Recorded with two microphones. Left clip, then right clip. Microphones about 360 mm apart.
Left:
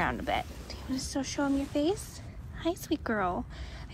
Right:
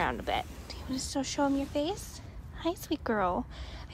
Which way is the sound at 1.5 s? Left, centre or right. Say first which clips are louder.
Left 1 dB; right.